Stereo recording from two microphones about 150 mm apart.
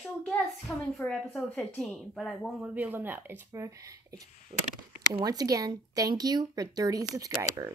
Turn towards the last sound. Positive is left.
turn(degrees=-25)  # may be behind; listen again after turning